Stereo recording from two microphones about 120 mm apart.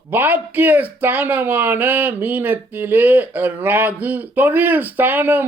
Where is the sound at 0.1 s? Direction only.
15° right (ahead or behind).